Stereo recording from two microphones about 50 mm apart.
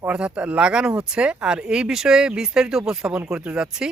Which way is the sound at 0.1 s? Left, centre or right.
Right.